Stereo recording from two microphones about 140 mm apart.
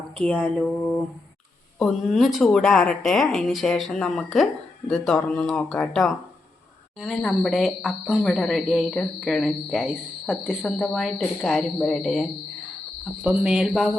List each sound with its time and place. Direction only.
0.2 s a woman's voice: 10° left (ahead or behind)
13.2 s cricket: 10° right (ahead or behind)